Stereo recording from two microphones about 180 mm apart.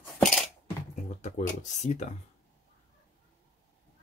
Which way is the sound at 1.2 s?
40° left (ahead or behind).